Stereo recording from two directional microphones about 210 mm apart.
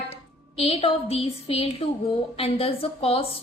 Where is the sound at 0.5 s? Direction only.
30° left (ahead or behind).